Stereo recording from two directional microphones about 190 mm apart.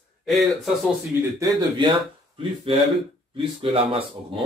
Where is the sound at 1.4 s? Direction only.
20° right (ahead or behind).